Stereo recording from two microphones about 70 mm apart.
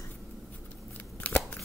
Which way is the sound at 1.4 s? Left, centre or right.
Centre.